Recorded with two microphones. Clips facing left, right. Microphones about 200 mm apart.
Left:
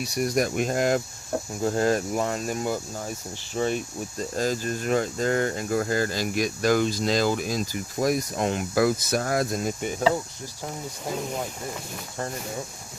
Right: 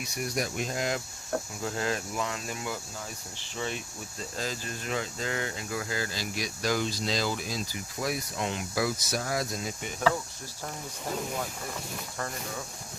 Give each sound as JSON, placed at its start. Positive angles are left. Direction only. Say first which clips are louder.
{"t": 0.0, "sound": "speech", "louder": "left 8 dB", "side_deg": 40}